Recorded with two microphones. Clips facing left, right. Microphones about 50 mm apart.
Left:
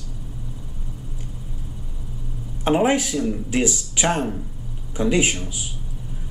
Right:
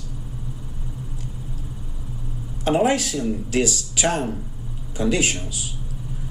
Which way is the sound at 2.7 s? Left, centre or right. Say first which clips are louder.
Left 1 dB; centre.